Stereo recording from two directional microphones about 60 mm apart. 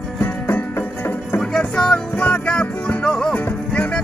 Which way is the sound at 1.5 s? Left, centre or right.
Centre.